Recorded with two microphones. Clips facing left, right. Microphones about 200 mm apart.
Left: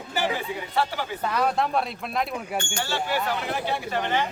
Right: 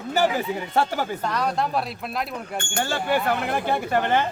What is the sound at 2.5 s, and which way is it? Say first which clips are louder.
Speech: right 3 dB; 50° right (ahead or behind).